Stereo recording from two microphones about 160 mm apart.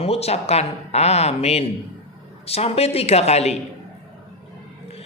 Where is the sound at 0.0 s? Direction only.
40° left (ahead or behind).